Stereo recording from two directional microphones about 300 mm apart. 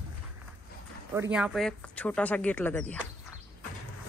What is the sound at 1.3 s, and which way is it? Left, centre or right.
Speech, centre.